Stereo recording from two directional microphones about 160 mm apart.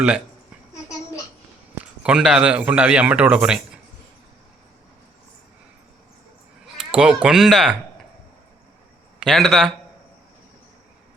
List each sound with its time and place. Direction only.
0.7 s babbling: 20° left (ahead or behind)
1.8 s a man's voice: 5° right (ahead or behind)
6.7 s speech: 5° right (ahead or behind)
9.2 s a man's voice: centre (ahead or behind)